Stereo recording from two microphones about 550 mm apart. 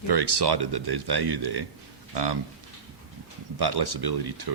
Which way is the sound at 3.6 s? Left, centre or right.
Right.